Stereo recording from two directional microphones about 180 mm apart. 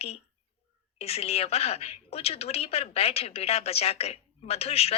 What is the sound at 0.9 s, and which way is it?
A woman's voice, 35° left (ahead or behind).